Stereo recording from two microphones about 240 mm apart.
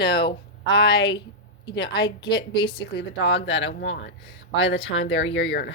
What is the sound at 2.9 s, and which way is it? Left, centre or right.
Speech, left.